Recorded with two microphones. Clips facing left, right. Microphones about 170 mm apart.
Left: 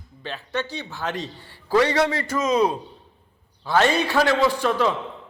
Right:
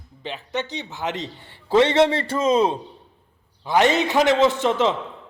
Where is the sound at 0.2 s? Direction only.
15° right (ahead or behind).